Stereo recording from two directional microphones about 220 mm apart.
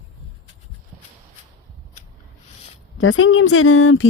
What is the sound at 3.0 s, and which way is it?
Speech, 65° left (ahead or behind).